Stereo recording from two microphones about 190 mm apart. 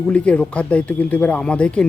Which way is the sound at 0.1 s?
5° left (ahead or behind).